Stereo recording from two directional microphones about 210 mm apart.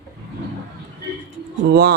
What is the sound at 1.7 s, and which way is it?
Speech, 50° right (ahead or behind).